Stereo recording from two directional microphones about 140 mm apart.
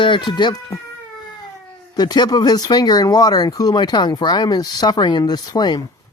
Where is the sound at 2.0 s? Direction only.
30° left (ahead or behind).